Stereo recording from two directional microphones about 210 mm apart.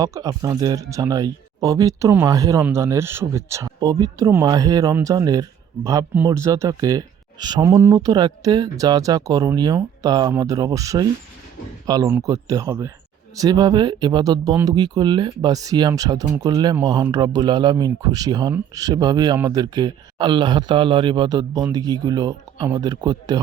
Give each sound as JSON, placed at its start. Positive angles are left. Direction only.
{"t": 0.0, "sound": "speech", "side_deg": -15}